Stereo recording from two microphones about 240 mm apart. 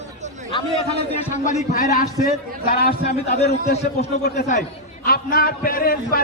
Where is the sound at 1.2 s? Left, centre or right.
Left.